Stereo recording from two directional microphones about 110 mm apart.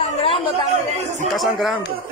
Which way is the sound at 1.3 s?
Centre (ahead or behind).